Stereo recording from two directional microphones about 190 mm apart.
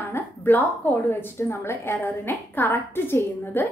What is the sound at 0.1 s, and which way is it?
A woman's voice, 10° left (ahead or behind).